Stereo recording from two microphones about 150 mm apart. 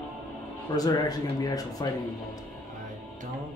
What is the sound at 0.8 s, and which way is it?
Speech, 25° left (ahead or behind).